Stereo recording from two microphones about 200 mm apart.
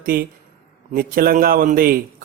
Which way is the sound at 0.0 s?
50° right (ahead or behind).